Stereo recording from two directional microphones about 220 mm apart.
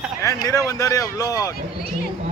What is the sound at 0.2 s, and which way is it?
Speech, 15° left (ahead or behind).